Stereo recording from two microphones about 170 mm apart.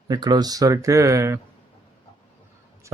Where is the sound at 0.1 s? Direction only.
25° right (ahead or behind).